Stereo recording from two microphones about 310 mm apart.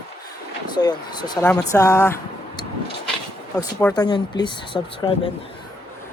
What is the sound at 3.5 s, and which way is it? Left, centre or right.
Speech, centre.